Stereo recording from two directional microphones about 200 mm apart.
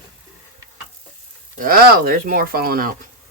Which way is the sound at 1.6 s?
50° right (ahead or behind).